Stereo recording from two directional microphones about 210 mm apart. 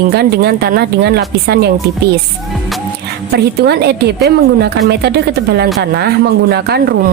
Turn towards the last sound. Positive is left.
turn(degrees=-50)  # may be behind; listen again after turning